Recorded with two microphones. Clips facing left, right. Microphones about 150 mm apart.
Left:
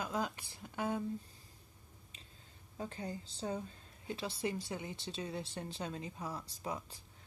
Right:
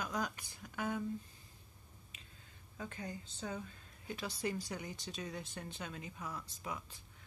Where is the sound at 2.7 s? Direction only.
30° left (ahead or behind).